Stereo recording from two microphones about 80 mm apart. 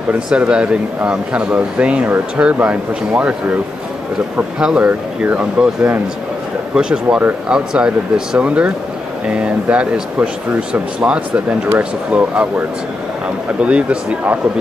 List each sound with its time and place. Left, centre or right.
0.3 s speech: centre
4.6 s speech: centre
13.6 s speech: centre